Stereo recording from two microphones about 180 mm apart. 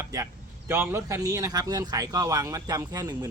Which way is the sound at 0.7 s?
15° right (ahead or behind).